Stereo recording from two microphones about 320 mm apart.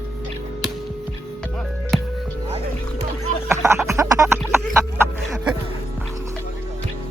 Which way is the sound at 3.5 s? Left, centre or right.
Centre.